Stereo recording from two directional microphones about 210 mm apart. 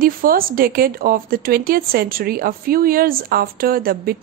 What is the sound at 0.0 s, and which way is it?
Speech, 45° right (ahead or behind).